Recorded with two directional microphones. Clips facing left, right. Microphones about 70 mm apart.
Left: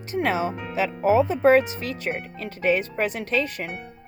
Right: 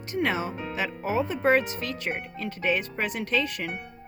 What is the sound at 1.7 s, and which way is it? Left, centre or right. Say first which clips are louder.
Speech: left 2 dB; left.